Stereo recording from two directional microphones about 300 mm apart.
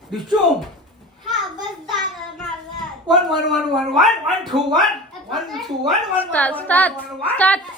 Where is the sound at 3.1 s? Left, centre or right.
Centre.